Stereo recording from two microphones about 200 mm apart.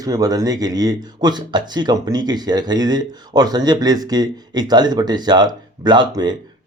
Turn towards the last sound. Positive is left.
turn(degrees=-20)  # may be behind; listen again after turning